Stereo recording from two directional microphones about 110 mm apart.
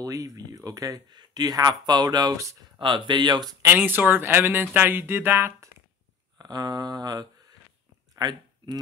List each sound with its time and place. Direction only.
0.0 s speech: 30° right (ahead or behind)
2.8 s speech: 45° right (ahead or behind)
3.6 s speech: 15° right (ahead or behind)
6.3 s a sound: 35° right (ahead or behind)
8.2 s speech: 40° right (ahead or behind)